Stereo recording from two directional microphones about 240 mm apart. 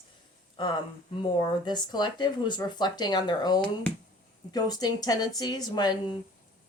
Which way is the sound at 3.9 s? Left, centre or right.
Centre.